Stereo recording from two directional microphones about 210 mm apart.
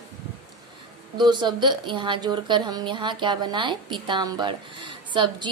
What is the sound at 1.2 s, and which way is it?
A woman's voice, 20° right (ahead or behind).